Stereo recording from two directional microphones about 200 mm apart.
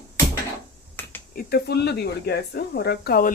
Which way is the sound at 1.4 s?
50° left (ahead or behind).